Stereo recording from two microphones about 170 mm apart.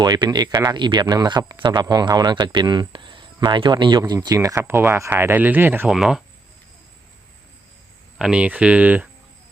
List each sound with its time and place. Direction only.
0.0 s a man's voice: 25° right (ahead or behind); by 6.2 s centre (ahead or behind)
8.2 s speech: 5° right (ahead or behind)